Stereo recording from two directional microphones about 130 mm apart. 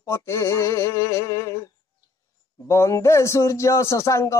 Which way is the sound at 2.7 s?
20° left (ahead or behind).